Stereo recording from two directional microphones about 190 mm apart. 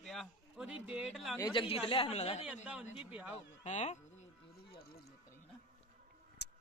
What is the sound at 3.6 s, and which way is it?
Speech, 35° left (ahead or behind).